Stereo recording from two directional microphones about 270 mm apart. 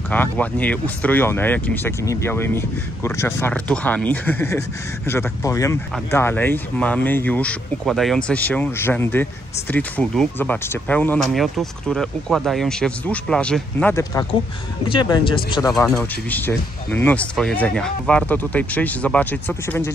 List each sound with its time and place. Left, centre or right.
0.1 s speech: centre
15.7 s speech: centre